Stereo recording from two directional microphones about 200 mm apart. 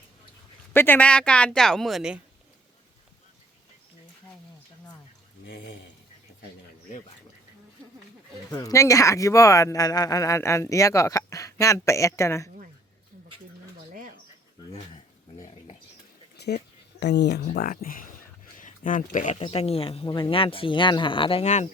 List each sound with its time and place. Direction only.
0.7 s speech: 10° left (ahead or behind)
8.4 s speech: 15° left (ahead or behind)
16.4 s a sound: 55° left (ahead or behind)
17.0 s speech: 60° left (ahead or behind); by 19.4 s 40° left (ahead or behind)
19.4 s speech: 30° left (ahead or behind)